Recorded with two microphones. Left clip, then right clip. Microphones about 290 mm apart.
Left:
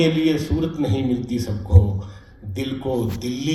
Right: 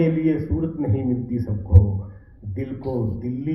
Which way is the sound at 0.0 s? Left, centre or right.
Left.